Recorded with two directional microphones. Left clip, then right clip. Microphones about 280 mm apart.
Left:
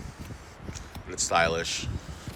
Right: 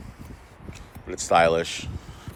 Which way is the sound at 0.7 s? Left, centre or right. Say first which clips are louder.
Right 4 dB; right.